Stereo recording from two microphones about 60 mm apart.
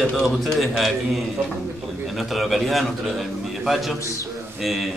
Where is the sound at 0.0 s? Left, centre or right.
Centre.